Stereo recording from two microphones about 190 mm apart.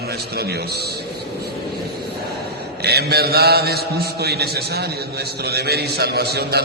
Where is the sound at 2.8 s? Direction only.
60° right (ahead or behind).